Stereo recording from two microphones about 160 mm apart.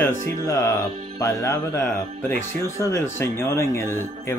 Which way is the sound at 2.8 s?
15° left (ahead or behind).